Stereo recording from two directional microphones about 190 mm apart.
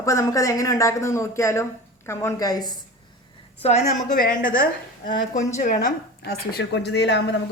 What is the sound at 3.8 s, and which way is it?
A woman's voice, 45° left (ahead or behind).